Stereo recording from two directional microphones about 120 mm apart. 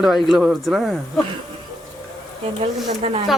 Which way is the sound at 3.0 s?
60° right (ahead or behind).